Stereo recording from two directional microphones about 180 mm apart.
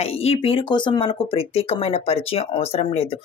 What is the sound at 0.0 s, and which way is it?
Speech, 35° left (ahead or behind).